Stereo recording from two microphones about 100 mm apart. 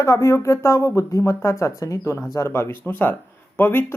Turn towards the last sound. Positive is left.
turn(degrees=20)  # may be behind; listen again after turning